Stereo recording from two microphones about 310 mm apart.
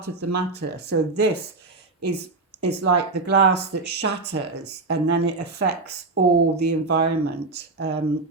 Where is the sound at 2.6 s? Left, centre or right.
Right.